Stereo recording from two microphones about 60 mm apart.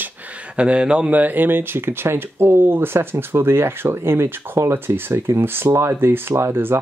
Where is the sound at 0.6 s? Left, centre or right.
Centre.